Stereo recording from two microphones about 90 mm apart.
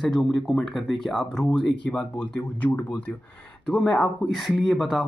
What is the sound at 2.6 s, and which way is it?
Speech, 20° left (ahead or behind).